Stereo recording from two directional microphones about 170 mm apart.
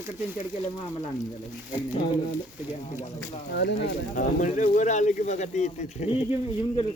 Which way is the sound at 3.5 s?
80° left.